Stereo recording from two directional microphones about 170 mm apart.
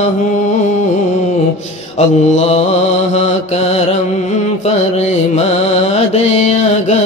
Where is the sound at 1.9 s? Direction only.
40° left (ahead or behind).